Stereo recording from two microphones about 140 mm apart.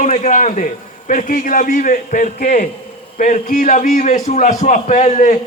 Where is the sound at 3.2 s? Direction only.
65° left (ahead or behind).